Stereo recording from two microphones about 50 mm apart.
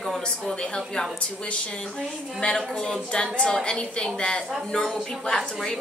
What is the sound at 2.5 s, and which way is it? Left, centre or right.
A woman's voice, centre.